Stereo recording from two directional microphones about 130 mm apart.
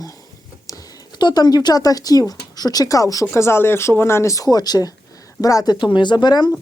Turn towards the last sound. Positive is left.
turn(degrees=35)  # may be behind; listen again after turning